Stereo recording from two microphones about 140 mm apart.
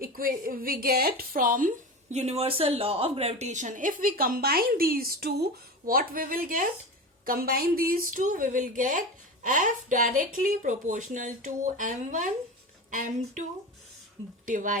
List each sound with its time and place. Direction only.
0.0 s speech: 90° right
7.3 s speech: 90° right; by 13.4 s 65° right (ahead or behind)
14.4 s speech: 70° right (ahead or behind)